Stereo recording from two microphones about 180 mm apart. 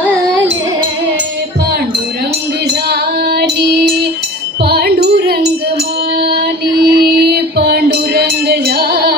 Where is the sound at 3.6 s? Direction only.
60° right (ahead or behind).